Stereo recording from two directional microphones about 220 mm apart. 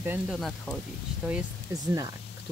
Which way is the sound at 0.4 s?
Centre (ahead or behind).